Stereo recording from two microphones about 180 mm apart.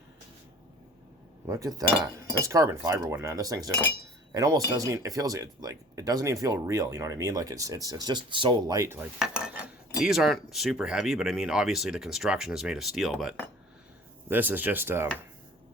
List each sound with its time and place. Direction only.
1.5 s speech: 20° right (ahead or behind)
9.1 s speech: 5° right (ahead or behind)